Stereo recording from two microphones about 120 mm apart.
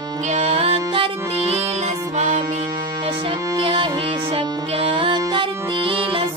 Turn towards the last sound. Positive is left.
turn(degrees=-45)  # may be behind; listen again after turning